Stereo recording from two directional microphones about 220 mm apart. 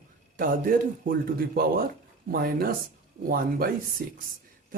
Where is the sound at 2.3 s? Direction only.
40° right (ahead or behind).